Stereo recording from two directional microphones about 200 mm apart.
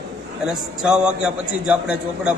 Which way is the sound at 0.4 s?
5° right (ahead or behind).